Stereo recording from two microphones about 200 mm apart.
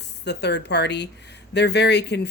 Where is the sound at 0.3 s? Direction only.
60° left (ahead or behind).